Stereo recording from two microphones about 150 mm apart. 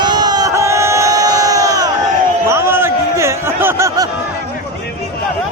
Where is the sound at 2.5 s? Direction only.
15° right (ahead or behind).